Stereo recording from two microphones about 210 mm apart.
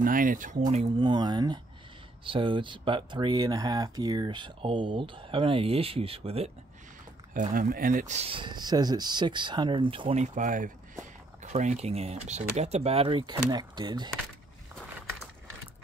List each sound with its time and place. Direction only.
0.0 s speech: 40° right (ahead or behind)
0.8 s speech: 20° right (ahead or behind)
7.3 s speech: 40° right (ahead or behind); by 14.1 s 20° right (ahead or behind)